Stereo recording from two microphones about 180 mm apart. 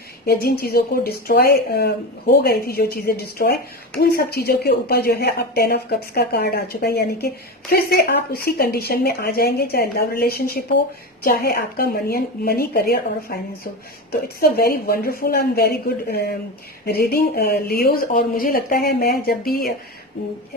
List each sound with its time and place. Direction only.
0.3 s a woman's voice: 60° left (ahead or behind)